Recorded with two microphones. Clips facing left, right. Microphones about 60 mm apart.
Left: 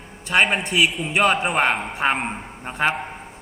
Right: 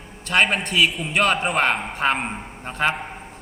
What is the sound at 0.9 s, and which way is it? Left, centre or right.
Speech, centre.